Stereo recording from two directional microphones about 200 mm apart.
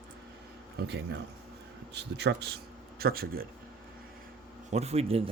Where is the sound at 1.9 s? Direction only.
60° right (ahead or behind).